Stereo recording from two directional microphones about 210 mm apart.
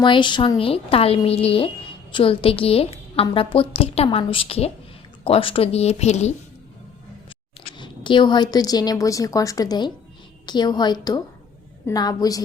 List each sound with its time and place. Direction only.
0.0 s a woman's voice: 20° left (ahead or behind)
7.8 s a woman's voice: 20° left (ahead or behind)